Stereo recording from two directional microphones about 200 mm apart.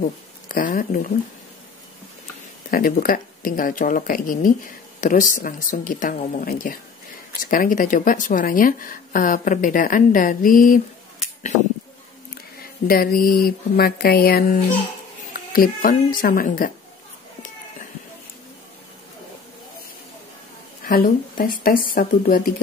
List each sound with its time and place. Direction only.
0.5 s speech: 45° left (ahead or behind)
2.7 s speech: 45° left (ahead or behind)
12.8 s speech: 45° left (ahead or behind)
20.8 s speech: 45° left (ahead or behind)